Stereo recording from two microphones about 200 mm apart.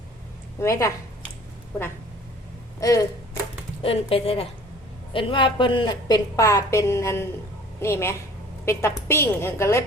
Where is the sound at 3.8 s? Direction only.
30° left (ahead or behind).